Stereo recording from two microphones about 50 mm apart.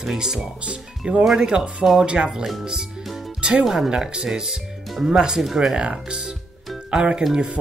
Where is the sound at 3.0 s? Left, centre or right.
Centre.